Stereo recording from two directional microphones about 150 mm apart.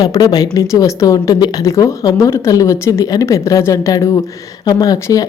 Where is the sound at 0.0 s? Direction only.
25° left (ahead or behind).